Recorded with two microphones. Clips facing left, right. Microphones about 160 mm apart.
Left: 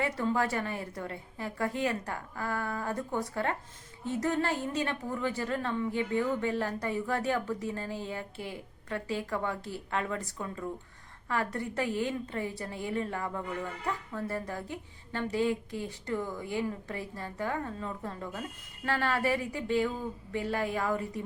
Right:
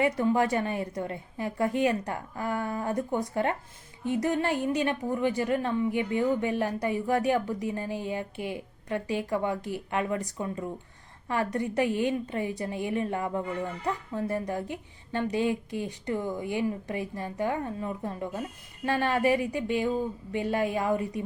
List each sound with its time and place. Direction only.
0.0 s a woman's voice: 15° right (ahead or behind)